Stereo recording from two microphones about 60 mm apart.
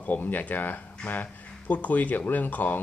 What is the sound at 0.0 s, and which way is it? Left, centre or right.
Speech, left.